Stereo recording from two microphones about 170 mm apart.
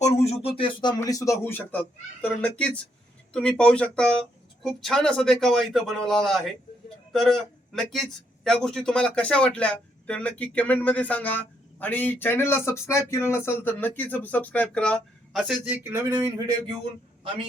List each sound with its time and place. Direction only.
0.0 s a man's voice: 40° left (ahead or behind); by 16.6 s 25° right (ahead or behind)